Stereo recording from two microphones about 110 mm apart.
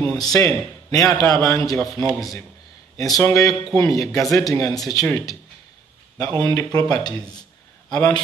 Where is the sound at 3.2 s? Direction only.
30° left (ahead or behind).